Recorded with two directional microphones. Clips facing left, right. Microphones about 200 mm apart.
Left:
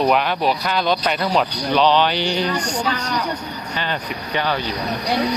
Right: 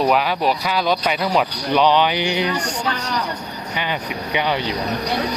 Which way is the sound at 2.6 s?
15° left (ahead or behind).